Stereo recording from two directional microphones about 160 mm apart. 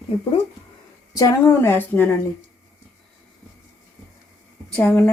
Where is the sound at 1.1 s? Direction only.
20° left (ahead or behind).